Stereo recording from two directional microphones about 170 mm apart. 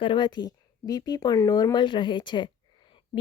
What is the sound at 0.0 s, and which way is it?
A woman's voice, 30° left (ahead or behind).